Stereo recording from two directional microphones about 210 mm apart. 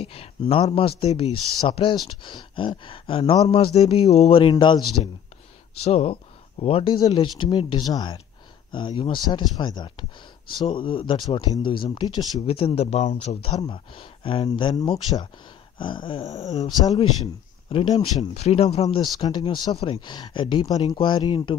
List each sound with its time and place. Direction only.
0.0 s speech: 25° left (ahead or behind)
17.6 s speech: 25° left (ahead or behind)